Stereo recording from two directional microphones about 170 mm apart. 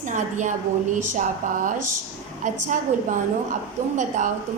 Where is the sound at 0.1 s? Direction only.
45° right (ahead or behind).